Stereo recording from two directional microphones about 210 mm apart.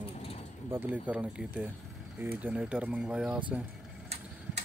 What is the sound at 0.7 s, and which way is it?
Speech, 10° right (ahead or behind).